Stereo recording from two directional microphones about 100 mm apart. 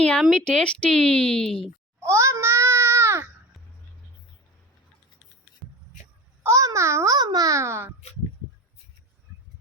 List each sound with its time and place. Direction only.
0.0 s a woman's voice: 10° left (ahead or behind)
2.0 s a sound: 30° right (ahead or behind)
5.6 s music: centre (ahead or behind)
6.4 s a child's voice: 30° right (ahead or behind)